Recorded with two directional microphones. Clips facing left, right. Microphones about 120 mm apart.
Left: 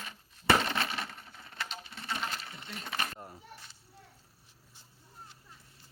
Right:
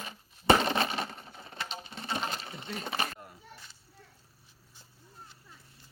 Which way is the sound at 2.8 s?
20° right (ahead or behind).